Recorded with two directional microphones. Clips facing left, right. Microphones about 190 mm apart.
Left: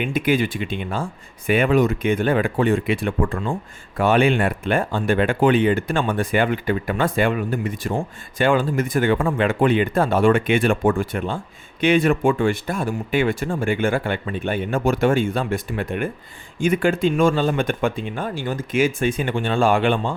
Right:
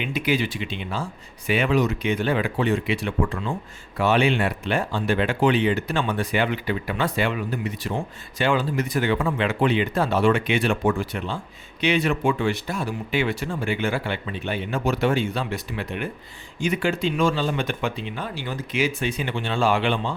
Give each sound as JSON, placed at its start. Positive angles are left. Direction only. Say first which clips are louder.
{"t": 0.0, "sound": "speech", "louder": "left 4 dB", "side_deg": 50}